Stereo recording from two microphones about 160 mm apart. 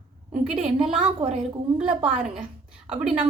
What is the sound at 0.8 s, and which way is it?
A woman's voice, 5° right (ahead or behind).